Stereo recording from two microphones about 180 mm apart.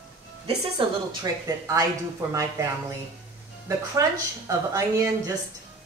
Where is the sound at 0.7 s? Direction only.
20° right (ahead or behind).